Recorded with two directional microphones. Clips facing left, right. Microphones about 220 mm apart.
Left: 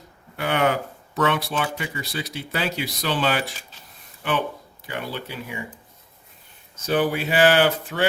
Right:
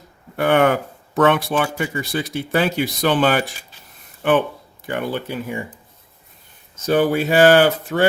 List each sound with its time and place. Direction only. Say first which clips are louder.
0.3 s speech: right 6 dB; 55° right (ahead or behind)
6.8 s speech: right 5 dB; 45° right (ahead or behind)